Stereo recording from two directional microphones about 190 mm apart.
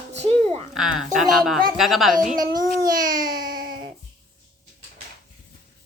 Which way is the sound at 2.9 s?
45° right (ahead or behind).